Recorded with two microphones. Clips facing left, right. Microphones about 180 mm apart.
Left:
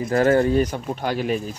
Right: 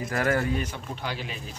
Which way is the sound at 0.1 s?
25° left (ahead or behind).